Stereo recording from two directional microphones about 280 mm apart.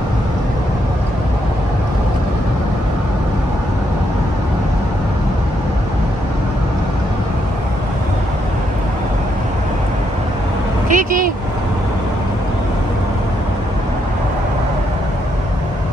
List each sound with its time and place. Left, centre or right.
10.9 s vehicle: right